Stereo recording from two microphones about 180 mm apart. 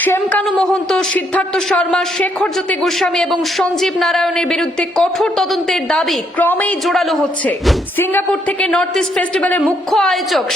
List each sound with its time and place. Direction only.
0.0 s a woman's voice: 10° left (ahead or behind)